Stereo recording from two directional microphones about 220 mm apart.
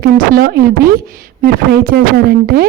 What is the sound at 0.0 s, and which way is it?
Speech, 45° right (ahead or behind).